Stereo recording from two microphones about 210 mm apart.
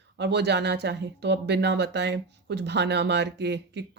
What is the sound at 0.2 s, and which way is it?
Speech, 55° right (ahead or behind).